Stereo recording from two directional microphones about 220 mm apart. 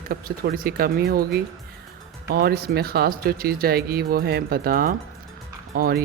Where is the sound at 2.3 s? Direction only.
45° right (ahead or behind).